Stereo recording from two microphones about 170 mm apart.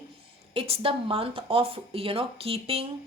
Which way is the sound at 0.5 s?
35° right (ahead or behind).